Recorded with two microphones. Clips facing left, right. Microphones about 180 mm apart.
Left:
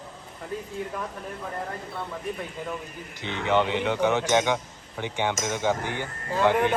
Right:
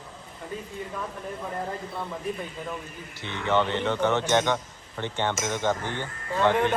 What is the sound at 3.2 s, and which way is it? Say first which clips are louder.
A man's voice: left 1 dB; 15° left (ahead or behind).